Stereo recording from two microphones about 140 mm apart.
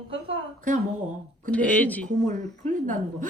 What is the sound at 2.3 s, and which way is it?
Speech, 65° right (ahead or behind).